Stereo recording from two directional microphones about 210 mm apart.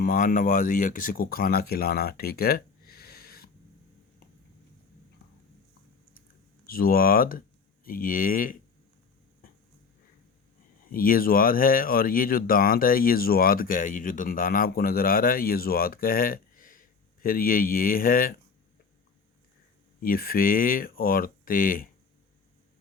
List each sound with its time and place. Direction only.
0.0 s speech: 45° left (ahead or behind)
6.7 s speech: 45° left (ahead or behind)
9.4 s dog: 45° left (ahead or behind)
10.8 s speech: 40° left (ahead or behind)
20.0 s speech: 45° left (ahead or behind)